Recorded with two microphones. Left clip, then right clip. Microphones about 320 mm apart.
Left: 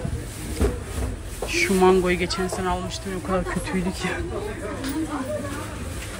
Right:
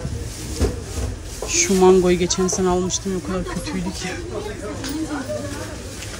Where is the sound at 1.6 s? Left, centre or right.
Centre.